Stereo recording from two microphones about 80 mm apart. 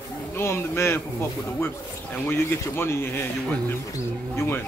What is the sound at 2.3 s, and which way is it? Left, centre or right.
Speech, left.